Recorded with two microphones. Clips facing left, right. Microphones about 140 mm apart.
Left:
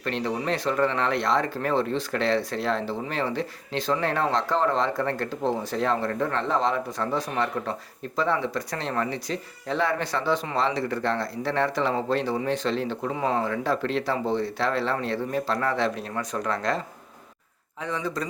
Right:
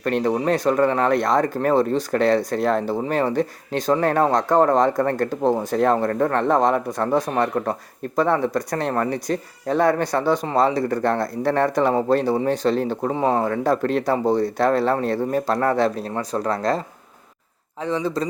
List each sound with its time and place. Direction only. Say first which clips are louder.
0.0 s speech: right 7 dB; 50° right (ahead or behind); by 18.3 s 30° right (ahead or behind)